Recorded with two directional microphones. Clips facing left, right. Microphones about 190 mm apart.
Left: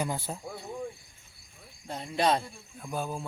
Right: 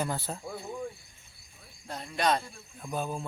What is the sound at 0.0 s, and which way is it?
Speech, 10° left (ahead or behind).